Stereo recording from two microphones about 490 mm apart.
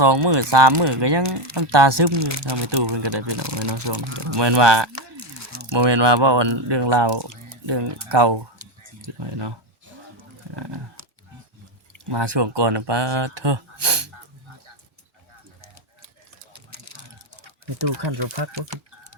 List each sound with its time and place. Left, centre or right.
0.0 s speech: right
2.1 s speech: right
2.5 s speech: right
3.4 s speech: right
4.4 s speech: right
4.9 s a sound: right
5.7 s speech: right
8.6 s a sound: right
9.2 s speech: right
12.0 s speech: right
16.5 s a sound: right
17.8 s speech: right